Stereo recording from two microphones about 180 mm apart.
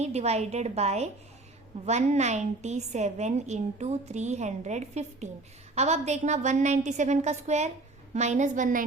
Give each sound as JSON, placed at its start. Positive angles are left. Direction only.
{"t": 0.0, "sound": "a woman's voice", "side_deg": -35}